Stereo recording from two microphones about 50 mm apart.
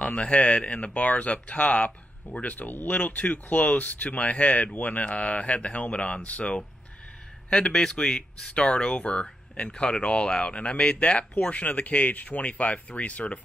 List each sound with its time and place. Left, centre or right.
0.0 s speech: left